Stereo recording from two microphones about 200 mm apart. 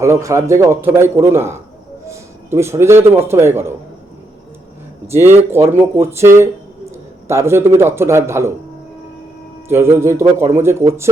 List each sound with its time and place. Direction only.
0.0 s a man's voice: 15° right (ahead or behind)
5.1 s a man's voice: 10° right (ahead or behind)
9.6 s speech: 10° right (ahead or behind)